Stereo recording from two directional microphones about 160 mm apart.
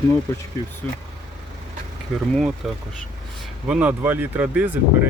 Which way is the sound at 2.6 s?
Centre (ahead or behind).